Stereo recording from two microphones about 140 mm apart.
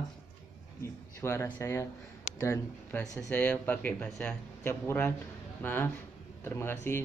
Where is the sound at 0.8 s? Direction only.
20° left (ahead or behind).